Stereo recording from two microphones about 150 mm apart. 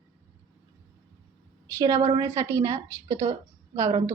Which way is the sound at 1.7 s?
20° right (ahead or behind).